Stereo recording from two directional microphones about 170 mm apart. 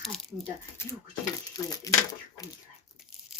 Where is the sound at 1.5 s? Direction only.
20° left (ahead or behind).